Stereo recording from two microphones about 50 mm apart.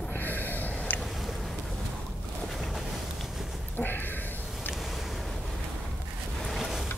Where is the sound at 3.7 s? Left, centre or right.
Left.